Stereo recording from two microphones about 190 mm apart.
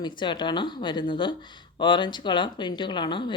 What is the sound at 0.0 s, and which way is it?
Speech, 25° left (ahead or behind).